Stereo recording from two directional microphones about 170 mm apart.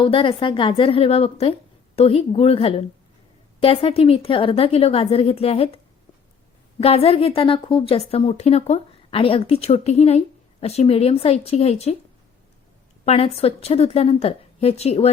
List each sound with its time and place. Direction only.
0.0 s a woman's voice: 30° left (ahead or behind)
13.1 s a woman's voice: 35° left (ahead or behind)